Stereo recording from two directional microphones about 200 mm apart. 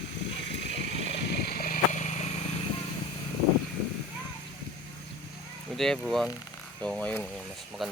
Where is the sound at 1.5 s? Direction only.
45° left (ahead or behind).